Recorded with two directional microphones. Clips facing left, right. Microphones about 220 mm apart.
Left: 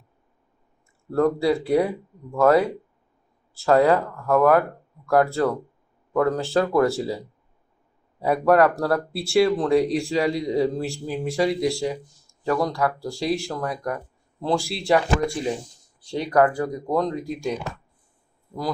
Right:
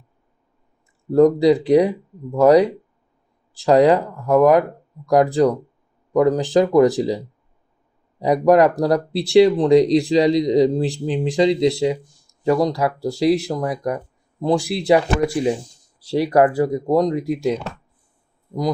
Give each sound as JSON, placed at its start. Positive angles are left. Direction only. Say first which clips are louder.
{"t": 1.1, "sound": "speech", "louder": "right 7 dB", "side_deg": -15}
{"t": 8.2, "sound": "speech", "louder": "right 4 dB", "side_deg": -20}